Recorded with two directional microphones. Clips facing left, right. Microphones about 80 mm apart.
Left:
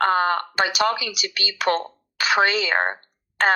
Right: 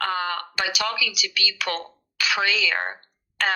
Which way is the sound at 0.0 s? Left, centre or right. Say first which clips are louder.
Left 7 dB; left.